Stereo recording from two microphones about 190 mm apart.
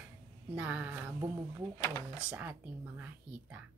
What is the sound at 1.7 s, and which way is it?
Speech, 15° left (ahead or behind).